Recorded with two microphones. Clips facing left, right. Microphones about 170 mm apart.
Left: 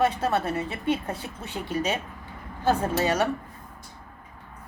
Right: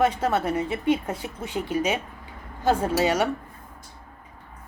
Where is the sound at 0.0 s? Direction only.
15° right (ahead or behind).